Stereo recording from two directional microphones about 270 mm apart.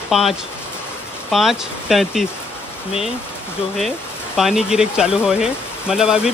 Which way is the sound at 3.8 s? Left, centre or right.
Centre.